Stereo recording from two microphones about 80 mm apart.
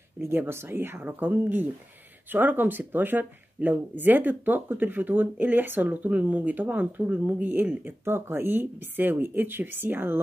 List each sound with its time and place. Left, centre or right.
0.2 s speech: right